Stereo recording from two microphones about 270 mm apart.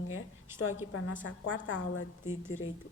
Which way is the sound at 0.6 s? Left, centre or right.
Left.